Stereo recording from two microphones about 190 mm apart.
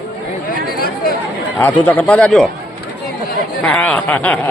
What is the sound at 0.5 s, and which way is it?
Chatter, 55° left (ahead or behind).